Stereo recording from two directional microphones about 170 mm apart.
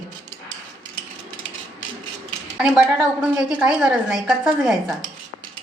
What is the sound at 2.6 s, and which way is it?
A woman's voice, 5° right (ahead or behind).